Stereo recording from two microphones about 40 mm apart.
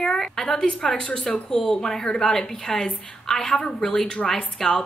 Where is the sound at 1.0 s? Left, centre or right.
Left.